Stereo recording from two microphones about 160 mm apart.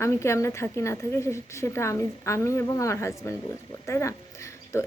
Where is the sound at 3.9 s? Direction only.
20° left (ahead or behind).